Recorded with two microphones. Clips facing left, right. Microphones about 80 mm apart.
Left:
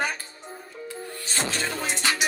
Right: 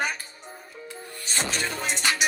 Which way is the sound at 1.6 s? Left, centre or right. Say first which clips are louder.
Even; left.